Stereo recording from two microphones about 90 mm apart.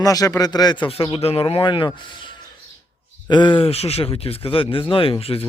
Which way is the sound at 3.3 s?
60° left (ahead or behind).